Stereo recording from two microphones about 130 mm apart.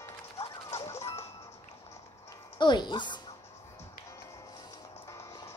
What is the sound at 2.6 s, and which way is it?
Speech, 35° left (ahead or behind).